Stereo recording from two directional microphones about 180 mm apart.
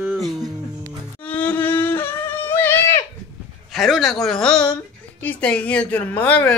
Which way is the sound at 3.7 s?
Centre (ahead or behind).